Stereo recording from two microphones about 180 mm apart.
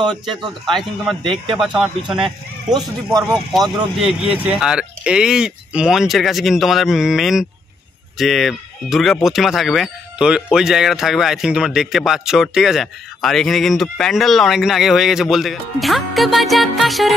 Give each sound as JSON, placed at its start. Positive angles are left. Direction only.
{"t": 0.1, "sound": "speech", "side_deg": 0}
{"t": 2.2, "sound": "speech", "side_deg": -20}
{"t": 4.5, "sound": "speech", "side_deg": -5}